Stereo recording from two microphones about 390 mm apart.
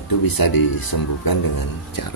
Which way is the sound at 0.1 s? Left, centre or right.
Left.